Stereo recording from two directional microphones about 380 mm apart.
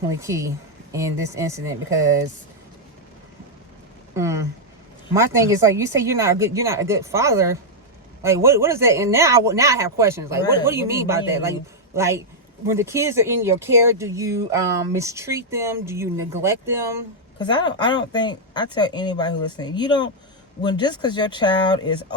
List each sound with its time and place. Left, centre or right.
0.2 s speech: centre
4.1 s speech: centre
17.4 s a woman's voice: centre